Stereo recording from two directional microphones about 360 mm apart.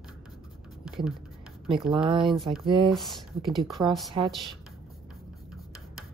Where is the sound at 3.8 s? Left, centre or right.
Centre.